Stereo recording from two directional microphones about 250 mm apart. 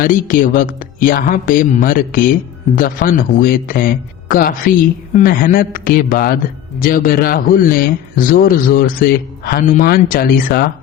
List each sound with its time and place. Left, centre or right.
0.0 s speech: left